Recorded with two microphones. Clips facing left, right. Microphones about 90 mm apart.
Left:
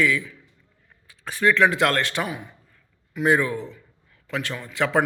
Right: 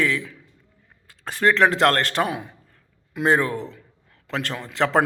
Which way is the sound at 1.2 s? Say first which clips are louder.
Right 1 dB; 40° right (ahead or behind).